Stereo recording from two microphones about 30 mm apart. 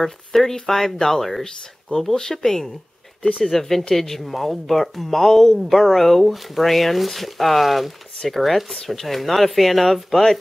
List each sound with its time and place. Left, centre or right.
0.0 s speech: centre
1.4 s speech: left; by 10.3 s centre